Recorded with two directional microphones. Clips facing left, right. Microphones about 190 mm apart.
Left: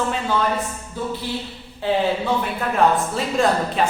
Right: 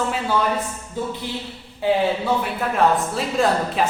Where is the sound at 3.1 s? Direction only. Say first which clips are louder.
Even; centre (ahead or behind).